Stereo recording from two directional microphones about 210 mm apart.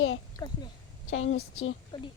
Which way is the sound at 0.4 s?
20° left (ahead or behind).